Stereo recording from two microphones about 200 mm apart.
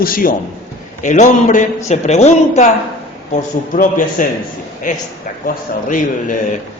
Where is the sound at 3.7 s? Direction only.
40° left (ahead or behind).